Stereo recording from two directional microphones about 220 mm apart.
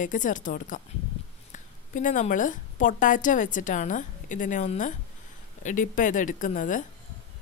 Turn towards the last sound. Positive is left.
turn(degrees=35)  # may be behind; listen again after turning